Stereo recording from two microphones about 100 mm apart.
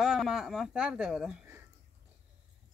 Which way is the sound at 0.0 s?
5° right (ahead or behind).